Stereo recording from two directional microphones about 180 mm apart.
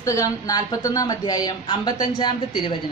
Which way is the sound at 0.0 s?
20° left (ahead or behind).